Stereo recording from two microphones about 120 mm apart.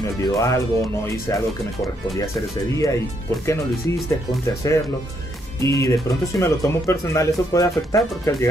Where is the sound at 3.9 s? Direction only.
25° left (ahead or behind).